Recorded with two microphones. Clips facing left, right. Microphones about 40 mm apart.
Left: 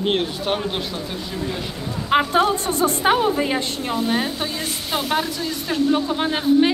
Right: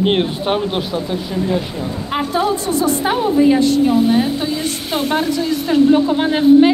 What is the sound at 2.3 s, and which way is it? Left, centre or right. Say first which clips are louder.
A woman's voice: right 1 dB; left.